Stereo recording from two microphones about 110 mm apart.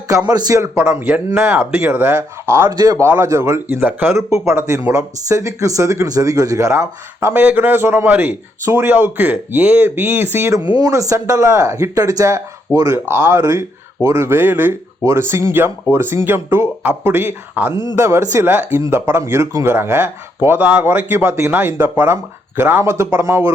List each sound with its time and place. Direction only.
0.3 s speech: 35° right (ahead or behind)
0.8 s speech: 20° right (ahead or behind)
2.6 s speech: 35° right (ahead or behind)
10.8 s speech: 30° right (ahead or behind); by 17.7 s 15° right (ahead or behind)
17.9 s speech: 25° right (ahead or behind)